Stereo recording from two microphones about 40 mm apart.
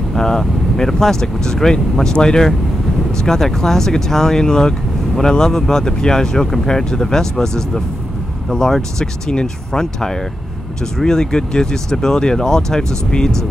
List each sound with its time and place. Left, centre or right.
0.1 s speech: centre